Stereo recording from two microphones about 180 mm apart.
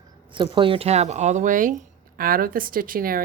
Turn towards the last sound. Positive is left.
turn(degrees=-55)  # may be behind; listen again after turning